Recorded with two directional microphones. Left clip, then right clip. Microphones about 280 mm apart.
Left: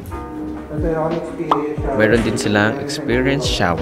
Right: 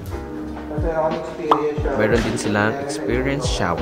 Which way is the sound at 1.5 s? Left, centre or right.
Centre.